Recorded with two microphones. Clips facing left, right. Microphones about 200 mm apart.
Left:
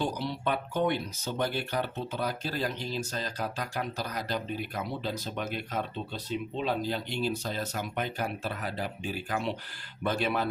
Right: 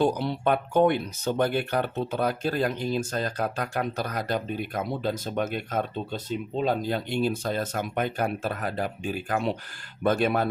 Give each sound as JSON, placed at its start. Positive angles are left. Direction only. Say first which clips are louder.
{"t": 0.0, "sound": "speech", "louder": "right 7 dB", "side_deg": -55}